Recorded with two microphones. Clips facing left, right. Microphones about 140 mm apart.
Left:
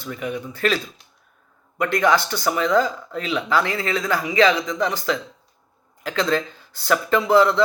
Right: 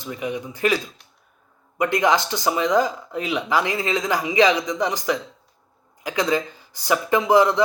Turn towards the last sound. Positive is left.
turn(degrees=-15)  # may be behind; listen again after turning